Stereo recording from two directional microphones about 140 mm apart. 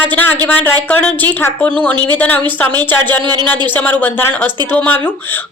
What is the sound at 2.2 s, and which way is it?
Speech, 10° left (ahead or behind).